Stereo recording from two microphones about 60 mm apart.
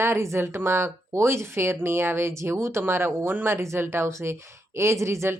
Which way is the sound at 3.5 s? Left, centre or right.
Right.